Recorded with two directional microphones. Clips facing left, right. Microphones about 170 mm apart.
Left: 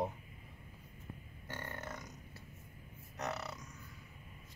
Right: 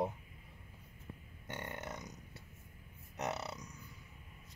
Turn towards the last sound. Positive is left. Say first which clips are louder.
# right 1 dB
turn(degrees=-25)  # may be behind; listen again after turning